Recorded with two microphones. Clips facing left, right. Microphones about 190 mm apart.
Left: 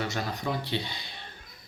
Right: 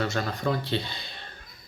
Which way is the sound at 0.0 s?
15° left (ahead or behind).